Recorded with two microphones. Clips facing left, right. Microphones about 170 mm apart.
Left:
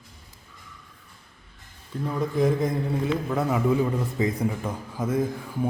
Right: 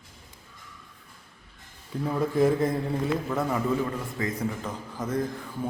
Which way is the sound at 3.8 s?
15° left (ahead or behind).